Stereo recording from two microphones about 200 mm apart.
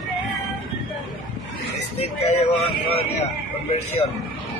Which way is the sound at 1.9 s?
30° left (ahead or behind).